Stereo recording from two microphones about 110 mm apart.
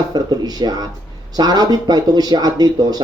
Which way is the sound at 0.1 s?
40° right (ahead or behind).